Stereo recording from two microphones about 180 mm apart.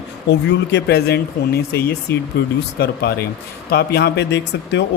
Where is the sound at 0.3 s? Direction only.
70° left (ahead or behind).